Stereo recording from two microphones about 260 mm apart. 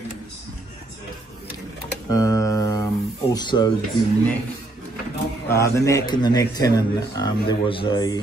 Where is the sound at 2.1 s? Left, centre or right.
Centre.